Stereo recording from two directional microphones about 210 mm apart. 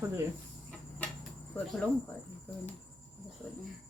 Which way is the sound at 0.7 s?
5° left (ahead or behind).